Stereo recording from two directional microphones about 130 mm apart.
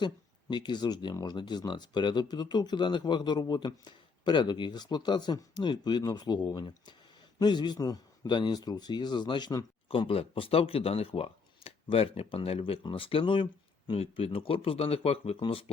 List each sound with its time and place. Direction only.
0.5 s speech: 35° left (ahead or behind)
9.9 s speech: 45° left (ahead or behind)